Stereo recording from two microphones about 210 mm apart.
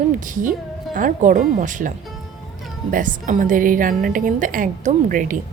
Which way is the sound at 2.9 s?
40° right (ahead or behind).